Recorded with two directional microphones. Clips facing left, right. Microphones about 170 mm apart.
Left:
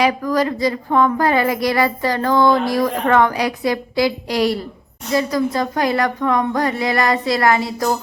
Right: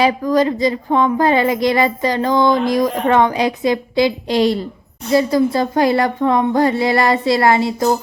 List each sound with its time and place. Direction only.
0.0 s a woman's voice: 20° right (ahead or behind)